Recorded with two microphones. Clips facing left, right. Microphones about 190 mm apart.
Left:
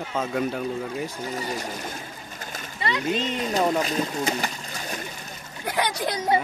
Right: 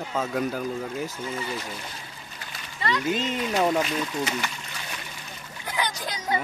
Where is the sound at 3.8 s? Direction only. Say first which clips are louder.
Left 2 dB; 40° left (ahead or behind).